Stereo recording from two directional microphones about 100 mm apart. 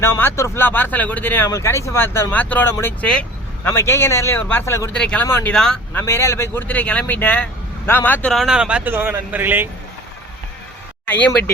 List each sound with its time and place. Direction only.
0.0 s speech: 25° left (ahead or behind)
1.5 s speech: 30° left (ahead or behind); by 3.7 s 10° left (ahead or behind)
3.7 s speech: 25° left (ahead or behind)
4.9 s speech: 10° left (ahead or behind)
5.2 s speech: 20° left (ahead or behind)
5.5 s speech: 5° left (ahead or behind)
5.9 s speech: 25° left (ahead or behind)
8.3 s speech: centre (ahead or behind)
8.9 s speech: 20° right (ahead or behind)
11.0 s vehicle: 15° left (ahead or behind)